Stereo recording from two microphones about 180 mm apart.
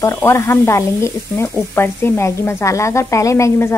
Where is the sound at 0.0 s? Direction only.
15° left (ahead or behind).